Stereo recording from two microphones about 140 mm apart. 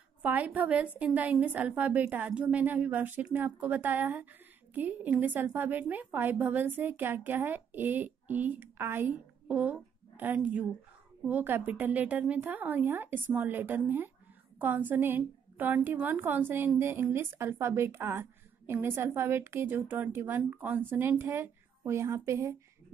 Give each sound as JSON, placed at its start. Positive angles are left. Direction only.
{"t": 0.2, "sound": "a woman's voice", "side_deg": -10}